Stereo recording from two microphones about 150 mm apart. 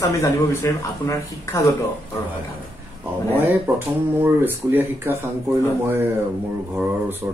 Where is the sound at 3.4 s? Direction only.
15° right (ahead or behind).